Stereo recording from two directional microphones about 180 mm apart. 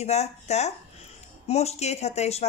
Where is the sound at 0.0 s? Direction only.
35° left (ahead or behind).